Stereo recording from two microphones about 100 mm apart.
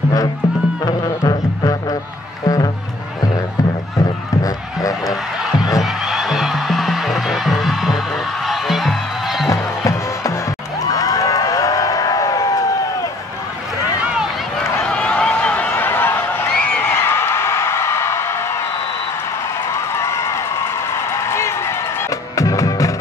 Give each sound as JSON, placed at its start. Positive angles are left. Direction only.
{"t": 1.3, "sound": "music", "side_deg": 35}
{"t": 5.0, "sound": "music", "side_deg": -5}
{"t": 9.5, "sound": "music", "side_deg": 35}
{"t": 10.8, "sound": "a sound", "side_deg": 35}
{"t": 14.0, "sound": "run", "side_deg": -10}
{"t": 14.8, "sound": "a sound", "side_deg": 10}
{"t": 16.8, "sound": "music", "side_deg": 25}
{"t": 19.7, "sound": "a sound", "side_deg": 30}
{"t": 22.4, "sound": "music", "side_deg": 35}